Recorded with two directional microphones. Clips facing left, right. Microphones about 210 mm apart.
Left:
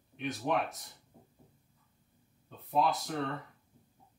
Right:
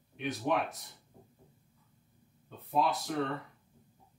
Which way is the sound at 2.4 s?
Centre (ahead or behind).